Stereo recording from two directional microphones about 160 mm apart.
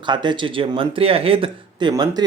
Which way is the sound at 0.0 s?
30° right (ahead or behind).